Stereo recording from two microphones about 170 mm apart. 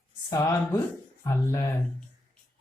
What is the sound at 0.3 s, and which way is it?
Speech, 20° left (ahead or behind).